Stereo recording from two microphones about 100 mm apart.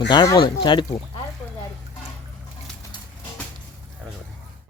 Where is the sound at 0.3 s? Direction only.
55° left (ahead or behind).